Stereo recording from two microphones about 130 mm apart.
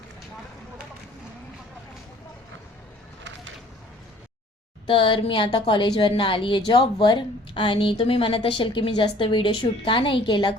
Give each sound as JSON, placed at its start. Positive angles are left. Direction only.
{"t": 4.9, "sound": "a woman's voice", "side_deg": 40}